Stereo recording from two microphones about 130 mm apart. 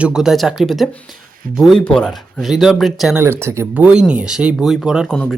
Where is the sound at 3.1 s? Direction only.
20° right (ahead or behind).